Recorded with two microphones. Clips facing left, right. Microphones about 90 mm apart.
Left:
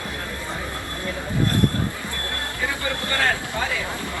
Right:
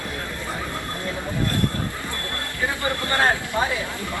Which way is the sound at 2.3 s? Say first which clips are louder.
Right 1 dB; 20° right (ahead or behind).